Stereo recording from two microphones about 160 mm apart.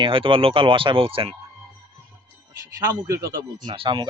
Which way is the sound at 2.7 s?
20° right (ahead or behind).